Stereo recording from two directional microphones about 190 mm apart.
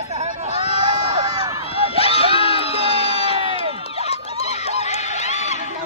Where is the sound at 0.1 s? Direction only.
35° right (ahead or behind).